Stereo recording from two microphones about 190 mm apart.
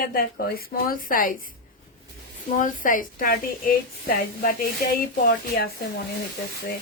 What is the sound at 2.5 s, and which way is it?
Speech, 45° left (ahead or behind).